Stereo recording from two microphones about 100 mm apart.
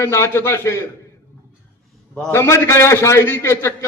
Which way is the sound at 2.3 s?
25° left (ahead or behind).